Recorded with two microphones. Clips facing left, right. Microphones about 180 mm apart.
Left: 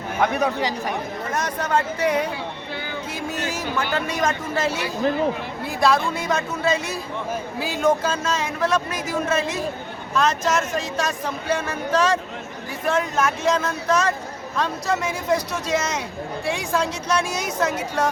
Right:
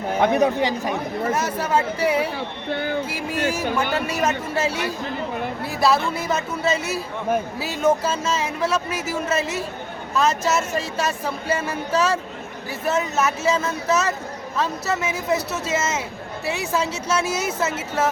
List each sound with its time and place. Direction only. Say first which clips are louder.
0.2 s a man's voice: right 3 dB; 25° right (ahead or behind)
1.3 s speech: even; 5° right (ahead or behind)
2.6 s speech: right 7 dB; 55° right (ahead or behind)
3.1 s a woman's voice: right 3 dB; 10° right (ahead or behind)